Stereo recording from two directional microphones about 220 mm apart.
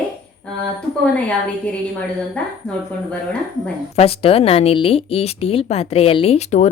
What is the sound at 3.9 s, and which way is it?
Speech, 25° left (ahead or behind).